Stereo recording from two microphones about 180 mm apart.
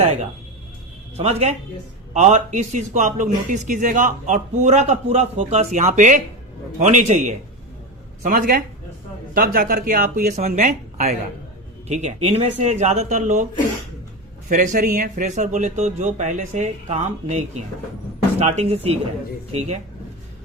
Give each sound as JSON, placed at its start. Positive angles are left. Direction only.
{"t": 1.1, "sound": "a man's voice", "side_deg": -35}
{"t": 14.5, "sound": "a man's voice", "side_deg": -45}